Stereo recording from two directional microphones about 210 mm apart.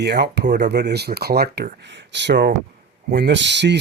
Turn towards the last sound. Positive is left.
turn(degrees=-55)  # may be behind; listen again after turning